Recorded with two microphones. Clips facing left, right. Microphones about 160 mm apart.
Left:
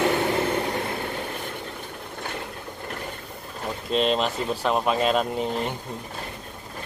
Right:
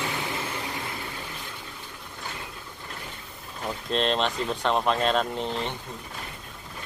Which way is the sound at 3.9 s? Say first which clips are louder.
Left 3 dB; 5° left (ahead or behind).